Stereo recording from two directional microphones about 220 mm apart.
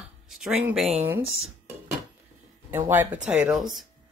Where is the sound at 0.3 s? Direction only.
Centre (ahead or behind).